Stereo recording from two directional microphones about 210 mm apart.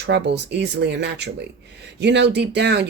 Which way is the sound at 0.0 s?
55° right (ahead or behind).